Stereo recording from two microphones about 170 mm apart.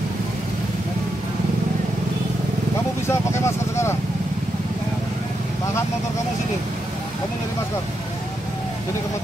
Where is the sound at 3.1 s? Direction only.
15° left (ahead or behind).